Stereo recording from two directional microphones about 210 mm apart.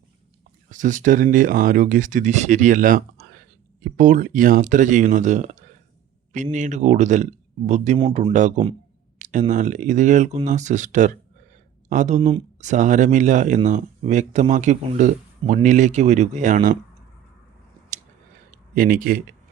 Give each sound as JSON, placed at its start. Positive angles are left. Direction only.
{"t": 0.7, "sound": "speech", "side_deg": -35}
{"t": 7.9, "sound": "speech", "side_deg": -20}
{"t": 8.3, "sound": "speech", "side_deg": -35}
{"t": 18.5, "sound": "a man's voice", "side_deg": -40}